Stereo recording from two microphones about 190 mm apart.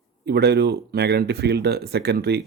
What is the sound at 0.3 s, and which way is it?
Speech, 60° right (ahead or behind).